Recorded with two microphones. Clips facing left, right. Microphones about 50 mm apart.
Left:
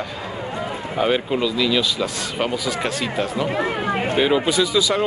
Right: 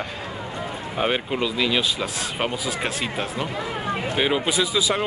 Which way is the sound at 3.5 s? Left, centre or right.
Left.